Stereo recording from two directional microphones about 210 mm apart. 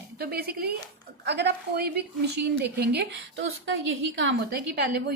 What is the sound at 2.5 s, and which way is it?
Speech, 50° right (ahead or behind).